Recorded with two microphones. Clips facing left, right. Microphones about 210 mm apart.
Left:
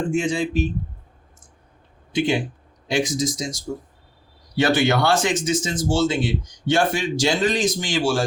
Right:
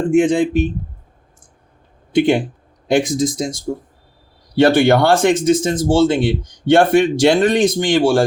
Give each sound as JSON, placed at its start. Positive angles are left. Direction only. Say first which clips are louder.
{"t": 0.2, "sound": "speech", "louder": "right 8 dB", "side_deg": -55}
{"t": 2.1, "sound": "speech", "louder": "right 7 dB", "side_deg": -55}